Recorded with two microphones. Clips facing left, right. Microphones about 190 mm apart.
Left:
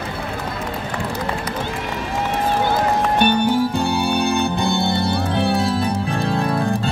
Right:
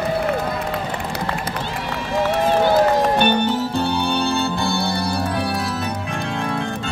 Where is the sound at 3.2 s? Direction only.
10° left (ahead or behind).